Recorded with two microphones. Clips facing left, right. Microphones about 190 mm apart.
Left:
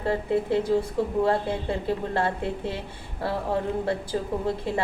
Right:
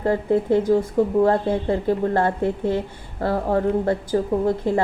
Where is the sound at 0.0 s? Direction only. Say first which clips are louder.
Right 5 dB; 45° right (ahead or behind).